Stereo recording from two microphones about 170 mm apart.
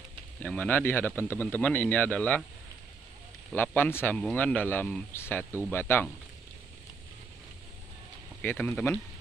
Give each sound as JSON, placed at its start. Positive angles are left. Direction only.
{"t": 0.4, "sound": "speech", "side_deg": 10}
{"t": 3.5, "sound": "speech", "side_deg": 10}
{"t": 8.4, "sound": "speech", "side_deg": 10}